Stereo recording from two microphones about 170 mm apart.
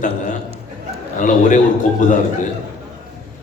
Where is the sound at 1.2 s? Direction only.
50° left (ahead or behind).